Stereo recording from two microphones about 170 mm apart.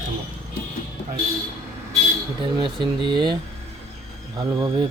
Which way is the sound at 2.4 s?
25° right (ahead or behind).